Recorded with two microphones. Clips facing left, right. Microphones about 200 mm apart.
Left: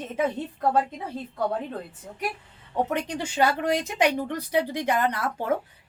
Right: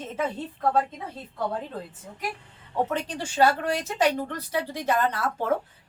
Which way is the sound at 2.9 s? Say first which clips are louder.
Left 2 dB; 15° left (ahead or behind).